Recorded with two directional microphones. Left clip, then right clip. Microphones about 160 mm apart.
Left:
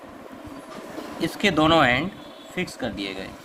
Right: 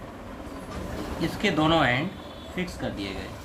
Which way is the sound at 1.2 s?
75° left (ahead or behind).